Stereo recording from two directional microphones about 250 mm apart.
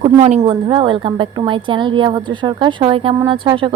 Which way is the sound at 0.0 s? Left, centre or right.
Right.